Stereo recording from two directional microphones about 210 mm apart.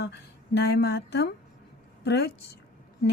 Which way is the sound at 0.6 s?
50° left (ahead or behind).